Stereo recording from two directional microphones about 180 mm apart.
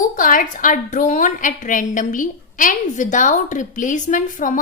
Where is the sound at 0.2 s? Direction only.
50° left (ahead or behind).